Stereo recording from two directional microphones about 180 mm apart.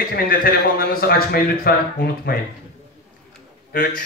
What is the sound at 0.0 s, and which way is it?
Speech, 55° left (ahead or behind).